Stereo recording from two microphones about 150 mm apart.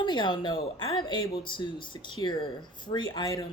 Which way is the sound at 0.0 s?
30° left (ahead or behind).